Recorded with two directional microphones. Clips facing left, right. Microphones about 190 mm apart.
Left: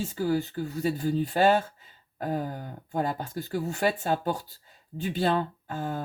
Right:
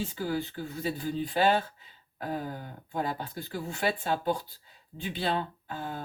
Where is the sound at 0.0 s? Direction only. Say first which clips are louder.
Left 4 dB; 40° left (ahead or behind).